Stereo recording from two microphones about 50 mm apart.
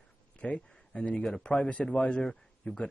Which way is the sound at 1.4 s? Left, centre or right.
Left.